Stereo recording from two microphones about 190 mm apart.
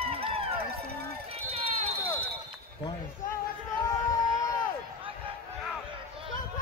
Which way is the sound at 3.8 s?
20° left (ahead or behind).